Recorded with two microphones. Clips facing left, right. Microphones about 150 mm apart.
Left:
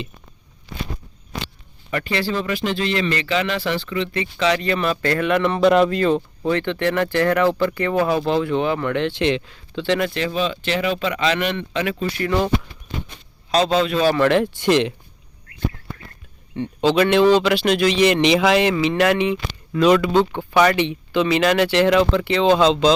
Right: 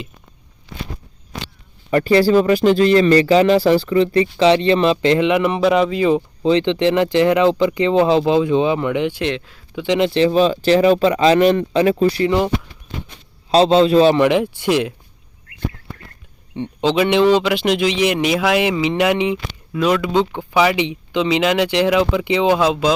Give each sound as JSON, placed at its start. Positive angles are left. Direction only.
{"t": 1.9, "sound": "speech", "side_deg": -35}
{"t": 5.4, "sound": "speech", "side_deg": -5}
{"t": 6.1, "sound": "speech", "side_deg": -15}
{"t": 9.2, "sound": "speech", "side_deg": 0}
{"t": 9.7, "sound": "speech", "side_deg": -15}
{"t": 10.1, "sound": "speech", "side_deg": -30}
{"t": 12.2, "sound": "a man's voice", "side_deg": -20}
{"t": 13.5, "sound": "a man's voice", "side_deg": -30}
{"t": 14.2, "sound": "speech", "side_deg": -15}
{"t": 16.5, "sound": "speech", "side_deg": -20}
{"t": 19.7, "sound": "speech", "side_deg": -5}